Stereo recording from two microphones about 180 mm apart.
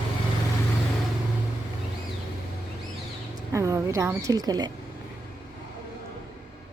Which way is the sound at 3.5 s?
15° right (ahead or behind).